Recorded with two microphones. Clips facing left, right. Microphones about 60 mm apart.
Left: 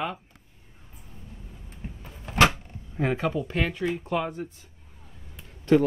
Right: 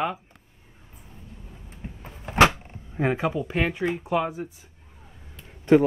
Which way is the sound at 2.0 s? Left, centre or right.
Right.